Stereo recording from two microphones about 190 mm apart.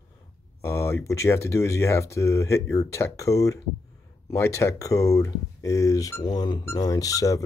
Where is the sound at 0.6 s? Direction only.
15° left (ahead or behind).